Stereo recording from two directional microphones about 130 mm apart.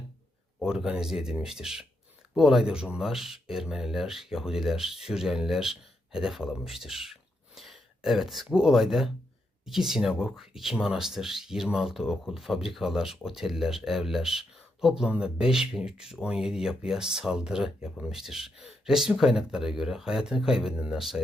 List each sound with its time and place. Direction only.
0.6 s speech: 5° right (ahead or behind)